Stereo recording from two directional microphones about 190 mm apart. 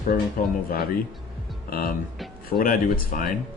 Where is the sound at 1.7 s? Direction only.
50° left (ahead or behind).